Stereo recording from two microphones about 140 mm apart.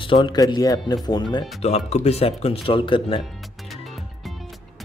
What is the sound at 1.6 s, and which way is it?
Speech, 50° left (ahead or behind).